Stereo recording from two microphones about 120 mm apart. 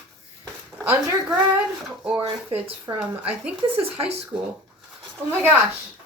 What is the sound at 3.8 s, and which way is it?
Speech, 55° right (ahead or behind).